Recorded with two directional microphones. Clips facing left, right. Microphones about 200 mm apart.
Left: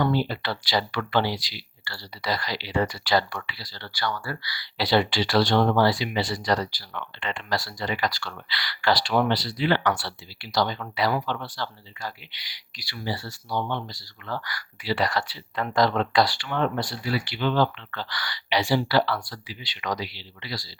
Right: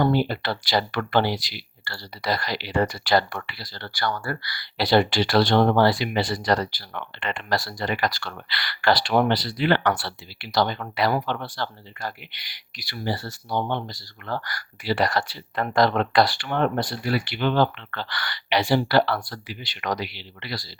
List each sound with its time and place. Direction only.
0.3 s speech: 50° right (ahead or behind)